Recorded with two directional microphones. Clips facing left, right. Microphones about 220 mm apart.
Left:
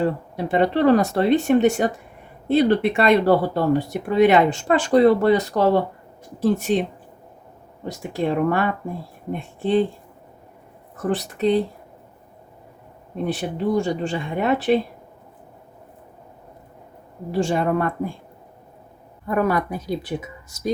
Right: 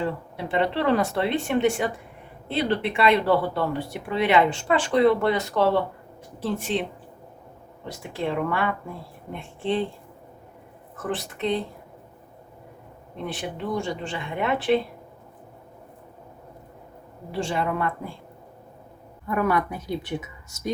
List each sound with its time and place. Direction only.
0.0 s speech: 40° left (ahead or behind)
7.9 s speech: 45° left (ahead or behind)
11.0 s speech: 40° left (ahead or behind)
13.2 s speech: 40° left (ahead or behind)
17.4 s speech: 45° left (ahead or behind)
19.3 s speech: 35° left (ahead or behind)